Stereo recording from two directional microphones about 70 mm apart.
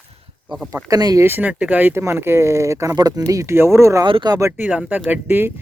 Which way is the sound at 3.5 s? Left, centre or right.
Right.